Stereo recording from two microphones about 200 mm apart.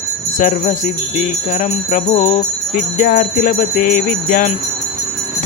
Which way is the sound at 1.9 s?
40° left (ahead or behind).